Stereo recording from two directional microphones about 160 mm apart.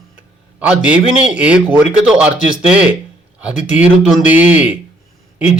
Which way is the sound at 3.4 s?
5° right (ahead or behind).